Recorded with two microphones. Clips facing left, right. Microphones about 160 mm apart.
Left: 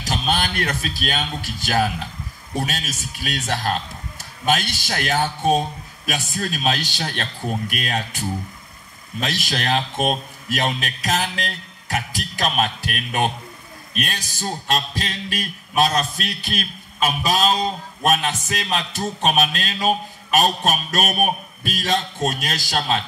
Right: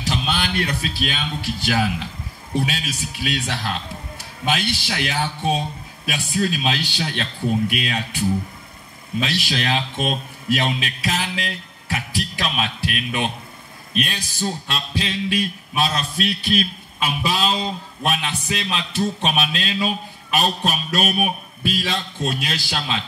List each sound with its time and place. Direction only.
0.0 s a man's voice: 45° left (ahead or behind)
9.2 s a man's voice: 45° left (ahead or behind)